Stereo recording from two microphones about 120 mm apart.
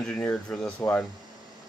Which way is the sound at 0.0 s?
10° left (ahead or behind).